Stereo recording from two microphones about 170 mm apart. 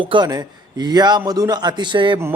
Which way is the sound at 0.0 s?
30° right (ahead or behind).